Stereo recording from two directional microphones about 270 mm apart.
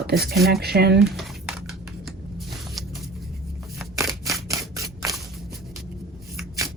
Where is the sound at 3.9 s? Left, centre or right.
Centre.